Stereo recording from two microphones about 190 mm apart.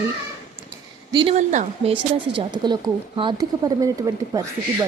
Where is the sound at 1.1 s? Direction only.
25° right (ahead or behind).